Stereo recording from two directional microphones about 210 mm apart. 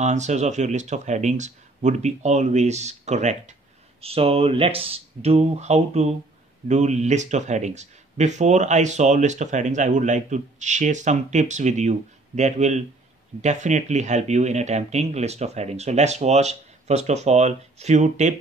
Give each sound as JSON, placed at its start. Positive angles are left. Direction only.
{"t": 0.0, "sound": "speech", "side_deg": -35}